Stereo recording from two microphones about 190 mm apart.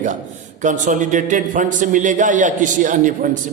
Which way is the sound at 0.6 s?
40° right (ahead or behind).